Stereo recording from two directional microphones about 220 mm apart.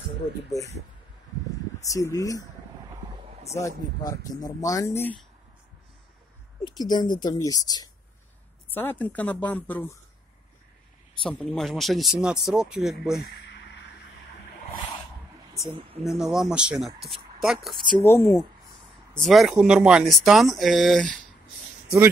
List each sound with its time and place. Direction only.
1.8 s speech: 15° left (ahead or behind)
3.5 s speech: 15° left (ahead or behind)
6.6 s speech: 20° left (ahead or behind)
11.2 s speech: 5° left (ahead or behind)
13.3 s a sound: 50° left (ahead or behind)
16.0 s speech: centre (ahead or behind)
18.0 s speech: 10° left (ahead or behind)
19.1 s speech: centre (ahead or behind)